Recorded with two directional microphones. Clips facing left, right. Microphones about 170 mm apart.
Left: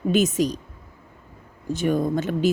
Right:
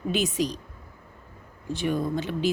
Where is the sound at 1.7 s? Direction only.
45° left (ahead or behind).